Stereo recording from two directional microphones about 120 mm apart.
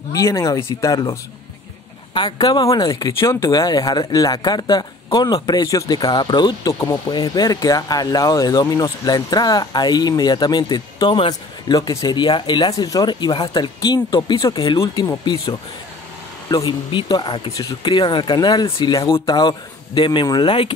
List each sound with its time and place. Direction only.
0.1 s speech: 25° left (ahead or behind)
2.1 s speech: 35° left (ahead or behind)
3.2 s speech: 25° left (ahead or behind); by 11.2 s 40° left (ahead or behind)
11.7 s speech: 30° left (ahead or behind)
14.8 s speech: 25° left (ahead or behind)
16.4 s speech: 35° left (ahead or behind)